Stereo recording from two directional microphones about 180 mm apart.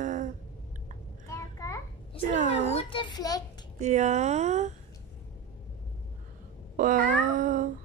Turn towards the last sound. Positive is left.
turn(degrees=-50)  # may be behind; listen again after turning